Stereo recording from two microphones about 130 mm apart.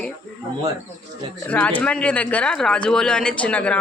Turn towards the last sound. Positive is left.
turn(degrees=10)  # may be behind; listen again after turning